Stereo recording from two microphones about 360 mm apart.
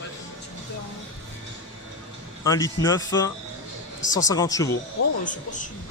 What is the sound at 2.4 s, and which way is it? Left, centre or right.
Speech, centre.